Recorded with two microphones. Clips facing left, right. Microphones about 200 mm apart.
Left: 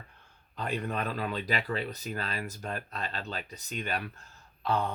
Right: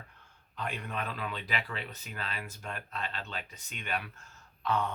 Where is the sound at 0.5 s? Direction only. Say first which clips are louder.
Left 5 dB; 35° left (ahead or behind).